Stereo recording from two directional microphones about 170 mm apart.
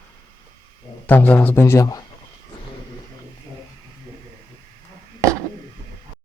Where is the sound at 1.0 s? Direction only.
10° left (ahead or behind).